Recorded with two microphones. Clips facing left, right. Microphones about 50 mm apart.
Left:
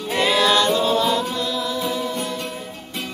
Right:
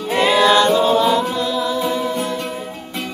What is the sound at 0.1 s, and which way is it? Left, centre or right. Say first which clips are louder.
A capella: right 4 dB; centre.